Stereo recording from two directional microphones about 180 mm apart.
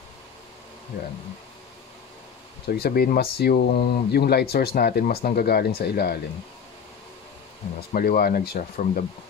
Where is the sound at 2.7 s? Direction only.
60° left (ahead or behind).